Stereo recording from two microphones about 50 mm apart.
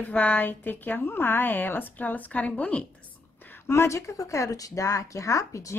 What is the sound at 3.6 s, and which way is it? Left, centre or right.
Speech, left.